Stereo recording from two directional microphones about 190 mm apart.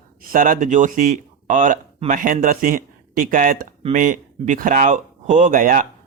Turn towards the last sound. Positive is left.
turn(degrees=-45)  # may be behind; listen again after turning